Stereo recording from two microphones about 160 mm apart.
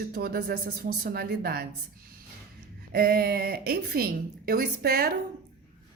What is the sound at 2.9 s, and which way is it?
A woman's voice, 70° right (ahead or behind).